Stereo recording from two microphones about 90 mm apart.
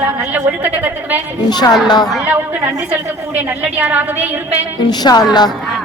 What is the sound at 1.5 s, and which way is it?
Speech, 50° left (ahead or behind).